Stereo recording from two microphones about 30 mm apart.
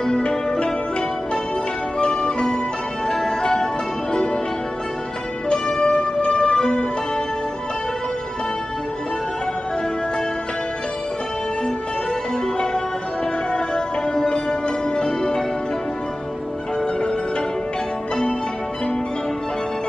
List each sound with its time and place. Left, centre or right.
0.0 s zither: left
2.0 s music: left
3.1 s music: centre
5.5 s music: left
13.5 s music: left